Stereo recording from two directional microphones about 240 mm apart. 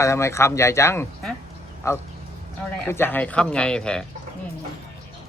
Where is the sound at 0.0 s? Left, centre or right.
Centre.